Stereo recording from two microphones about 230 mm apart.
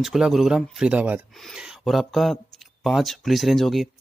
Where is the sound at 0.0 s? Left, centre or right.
Centre.